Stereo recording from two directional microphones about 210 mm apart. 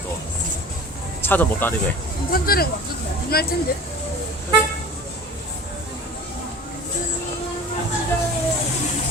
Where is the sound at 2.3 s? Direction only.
45° left (ahead or behind).